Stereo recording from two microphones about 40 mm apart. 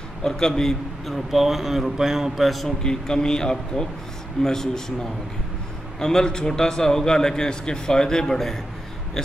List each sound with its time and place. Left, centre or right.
0.2 s a man's voice: centre
1.0 s speech: centre
2.4 s a man's voice: centre
2.8 s a man's voice: centre
5.9 s a man's voice: centre